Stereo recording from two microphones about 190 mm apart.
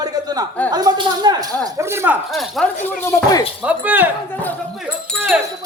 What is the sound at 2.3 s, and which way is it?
Speech, centre (ahead or behind).